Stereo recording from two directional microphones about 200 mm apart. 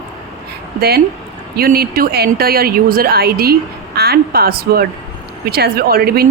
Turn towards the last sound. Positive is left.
turn(degrees=-50)  # may be behind; listen again after turning